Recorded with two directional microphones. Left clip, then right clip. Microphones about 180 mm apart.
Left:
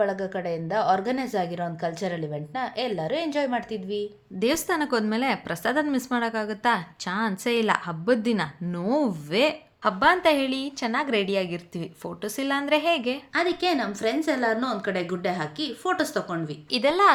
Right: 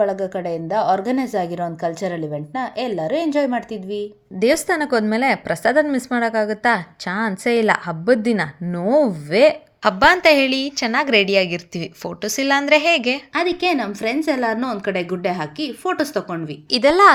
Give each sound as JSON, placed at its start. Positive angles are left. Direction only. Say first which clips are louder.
{"t": 0.0, "sound": "a woman's voice", "louder": "right 6 dB", "side_deg": -20}
{"t": 16.7, "sound": "a woman's voice", "louder": "right 8 dB", "side_deg": -35}